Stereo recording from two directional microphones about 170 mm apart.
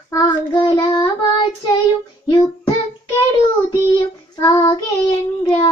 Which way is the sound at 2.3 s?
25° left (ahead or behind).